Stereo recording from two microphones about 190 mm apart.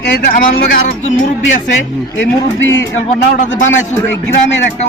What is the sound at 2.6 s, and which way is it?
Speech, 85° left.